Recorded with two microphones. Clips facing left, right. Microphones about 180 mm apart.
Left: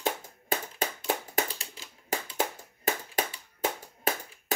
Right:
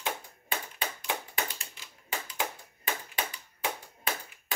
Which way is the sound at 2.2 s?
40° left (ahead or behind).